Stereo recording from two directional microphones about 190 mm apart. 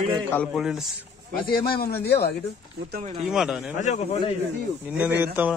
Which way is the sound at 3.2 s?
5° right (ahead or behind).